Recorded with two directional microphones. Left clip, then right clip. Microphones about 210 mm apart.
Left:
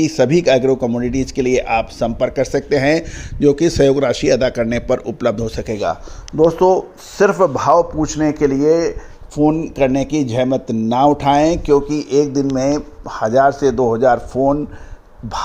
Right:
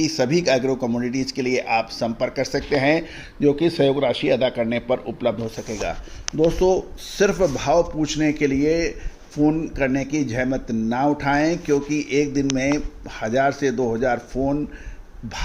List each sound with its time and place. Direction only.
0.0 s speech: 40° left (ahead or behind)
5.8 s speech: 30° left (ahead or behind)
6.4 s a man's voice: 10° left (ahead or behind)
9.4 s speech: 30° left (ahead or behind)
11.7 s a man's voice: 20° left (ahead or behind)